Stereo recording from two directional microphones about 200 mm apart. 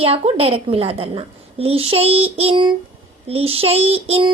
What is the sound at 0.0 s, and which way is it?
A woman's voice, 30° right (ahead or behind).